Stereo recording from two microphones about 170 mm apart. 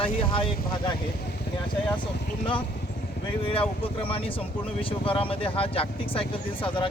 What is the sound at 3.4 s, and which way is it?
Speech, 30° left (ahead or behind).